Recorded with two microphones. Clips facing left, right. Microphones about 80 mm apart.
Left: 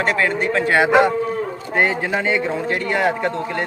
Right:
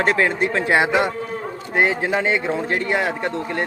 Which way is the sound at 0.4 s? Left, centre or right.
Centre.